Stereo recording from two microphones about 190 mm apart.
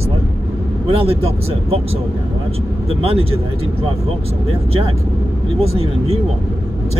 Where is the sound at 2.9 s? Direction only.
30° right (ahead or behind).